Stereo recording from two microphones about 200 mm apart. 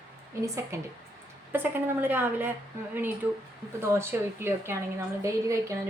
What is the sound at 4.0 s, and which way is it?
A woman's voice, 10° right (ahead or behind).